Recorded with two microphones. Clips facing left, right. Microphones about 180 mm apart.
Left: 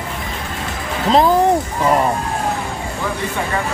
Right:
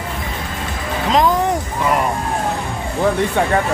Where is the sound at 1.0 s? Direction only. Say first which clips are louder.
Left 2 dB; 35° left (ahead or behind).